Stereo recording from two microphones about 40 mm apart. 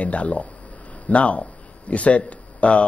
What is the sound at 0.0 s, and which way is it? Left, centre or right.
Speech, left.